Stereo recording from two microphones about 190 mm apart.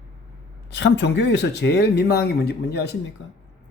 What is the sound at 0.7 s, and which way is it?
A woman's voice, 65° left (ahead or behind).